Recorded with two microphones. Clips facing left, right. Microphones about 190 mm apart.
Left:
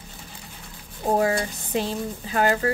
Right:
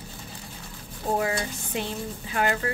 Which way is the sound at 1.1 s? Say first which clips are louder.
Left 5 dB; 40° left (ahead or behind).